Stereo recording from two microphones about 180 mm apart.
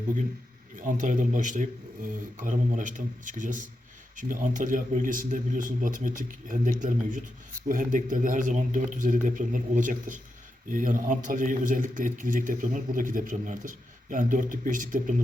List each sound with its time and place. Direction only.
0.8 s speech: 45° right (ahead or behind)